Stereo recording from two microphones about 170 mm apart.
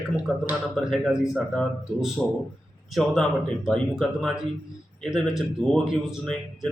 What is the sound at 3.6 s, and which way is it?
A man's voice, centre (ahead or behind).